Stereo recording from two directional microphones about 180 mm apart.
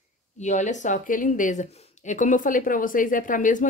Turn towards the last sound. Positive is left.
turn(degrees=45)  # may be behind; listen again after turning